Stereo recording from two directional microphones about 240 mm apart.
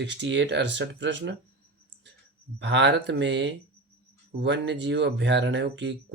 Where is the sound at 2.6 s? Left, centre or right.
Right.